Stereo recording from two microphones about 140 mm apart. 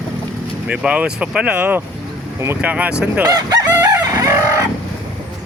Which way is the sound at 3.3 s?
25° right (ahead or behind).